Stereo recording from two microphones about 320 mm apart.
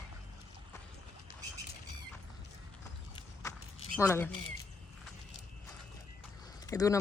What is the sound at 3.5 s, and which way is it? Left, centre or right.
Walk, centre.